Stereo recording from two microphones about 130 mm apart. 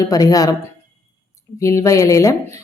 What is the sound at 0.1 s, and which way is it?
Speech, 30° left (ahead or behind).